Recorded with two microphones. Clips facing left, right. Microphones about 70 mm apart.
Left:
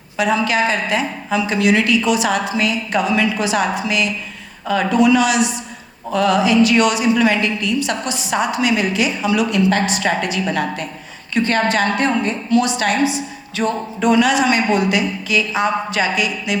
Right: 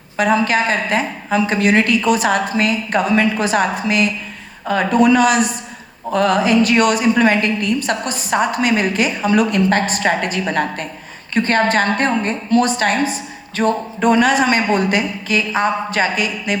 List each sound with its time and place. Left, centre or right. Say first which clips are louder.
0.2 s a woman's voice: right 1 dB; right